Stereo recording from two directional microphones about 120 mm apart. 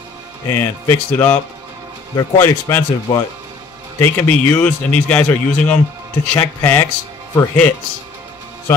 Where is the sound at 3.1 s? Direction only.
30° left (ahead or behind).